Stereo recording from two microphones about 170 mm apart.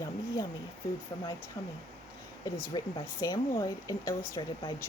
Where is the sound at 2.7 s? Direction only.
25° left (ahead or behind).